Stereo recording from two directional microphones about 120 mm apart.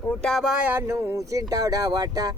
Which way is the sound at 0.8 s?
25° right (ahead or behind).